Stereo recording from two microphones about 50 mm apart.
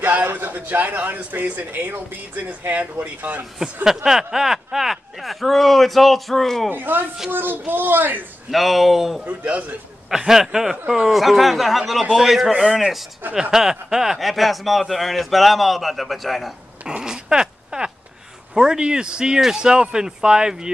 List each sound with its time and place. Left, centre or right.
0.3 s speech: right
3.5 s speech: centre
6.7 s speech: right
8.5 s speech: centre
9.2 s a man's voice: right
10.0 s speech: centre
16.8 s a sound: centre
18.5 s speech: centre